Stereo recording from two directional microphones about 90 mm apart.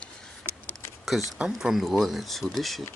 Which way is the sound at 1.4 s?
10° right (ahead or behind).